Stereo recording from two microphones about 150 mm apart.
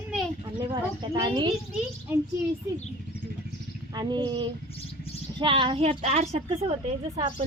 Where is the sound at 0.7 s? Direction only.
30° right (ahead or behind).